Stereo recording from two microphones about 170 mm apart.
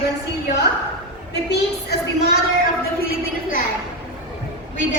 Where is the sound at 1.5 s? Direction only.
70° left (ahead or behind).